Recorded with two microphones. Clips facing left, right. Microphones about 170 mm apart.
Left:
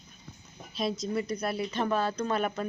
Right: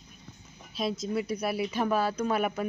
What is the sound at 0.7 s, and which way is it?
A woman's voice, 5° right (ahead or behind).